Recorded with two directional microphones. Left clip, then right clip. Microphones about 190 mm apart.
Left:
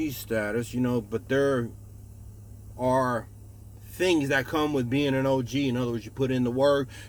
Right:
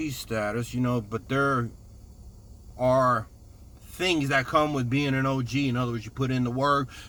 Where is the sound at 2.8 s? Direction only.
15° right (ahead or behind).